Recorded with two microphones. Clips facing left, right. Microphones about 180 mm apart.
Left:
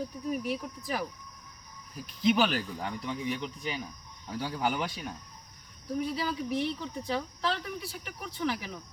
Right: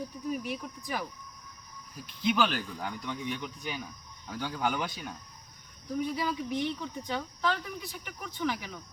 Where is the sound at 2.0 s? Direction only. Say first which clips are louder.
Left 4 dB; 40° left (ahead or behind).